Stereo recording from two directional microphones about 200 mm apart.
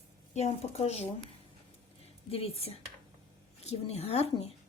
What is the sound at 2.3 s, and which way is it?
Speech, 30° left (ahead or behind).